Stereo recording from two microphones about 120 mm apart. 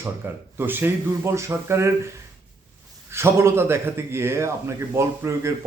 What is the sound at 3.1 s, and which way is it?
A man's voice, 20° right (ahead or behind).